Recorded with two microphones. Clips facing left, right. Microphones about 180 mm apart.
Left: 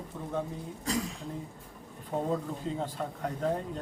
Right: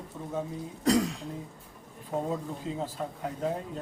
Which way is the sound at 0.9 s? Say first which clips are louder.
Right 8 dB; 75° right (ahead or behind).